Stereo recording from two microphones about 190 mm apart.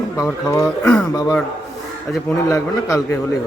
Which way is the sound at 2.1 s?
Centre (ahead or behind).